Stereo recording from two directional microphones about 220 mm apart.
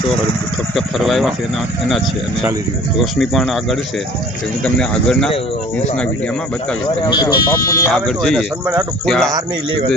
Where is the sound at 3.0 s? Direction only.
Centre (ahead or behind).